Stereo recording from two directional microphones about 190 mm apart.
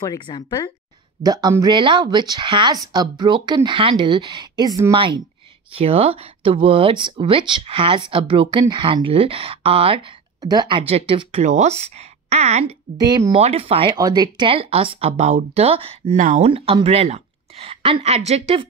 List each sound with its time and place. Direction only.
0.0 s speech: 20° left (ahead or behind)
1.2 s speech: 20° right (ahead or behind); by 12.7 s 35° right (ahead or behind)
12.9 s speech: 20° right (ahead or behind)
13.3 s speech: 30° right (ahead or behind)